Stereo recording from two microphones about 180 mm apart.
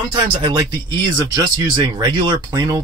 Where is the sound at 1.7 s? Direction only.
25° right (ahead or behind).